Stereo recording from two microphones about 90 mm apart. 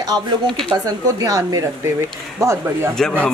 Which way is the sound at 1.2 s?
40° right (ahead or behind).